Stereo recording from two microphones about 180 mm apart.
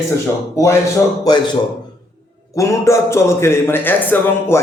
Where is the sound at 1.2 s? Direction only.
25° left (ahead or behind).